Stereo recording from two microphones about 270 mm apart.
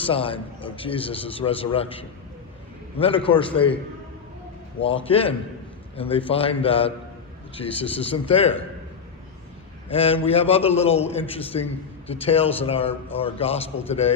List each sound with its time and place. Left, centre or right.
0.0 s a man's voice: centre
3.2 s a man's voice: centre
4.8 s a man's voice: left
9.9 s a man's voice: left